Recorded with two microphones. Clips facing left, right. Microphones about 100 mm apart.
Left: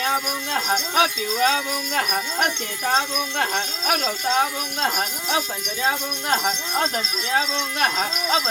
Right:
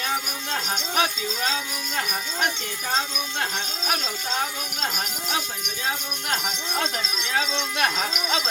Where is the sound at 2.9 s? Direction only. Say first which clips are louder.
Left 5 dB; 50° left (ahead or behind).